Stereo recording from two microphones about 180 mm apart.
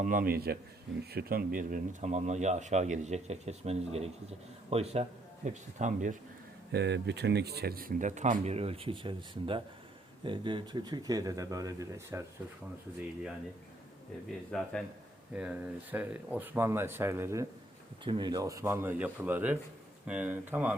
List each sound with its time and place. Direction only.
0.0 s a man's voice: 50° right (ahead or behind)
1.5 s speech: 45° right (ahead or behind)
6.7 s speech: 70° right (ahead or behind); by 12.2 s 15° right (ahead or behind)
14.5 s speech: centre (ahead or behind); by 17.4 s 15° right (ahead or behind)
18.0 s speech: 25° right (ahead or behind); by 20.7 s 10° right (ahead or behind)